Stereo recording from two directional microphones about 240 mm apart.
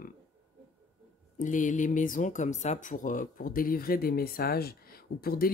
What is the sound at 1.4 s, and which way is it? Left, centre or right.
Speech, left.